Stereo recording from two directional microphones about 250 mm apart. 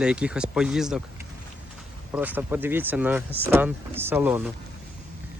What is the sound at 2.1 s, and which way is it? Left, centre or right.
Speech, centre.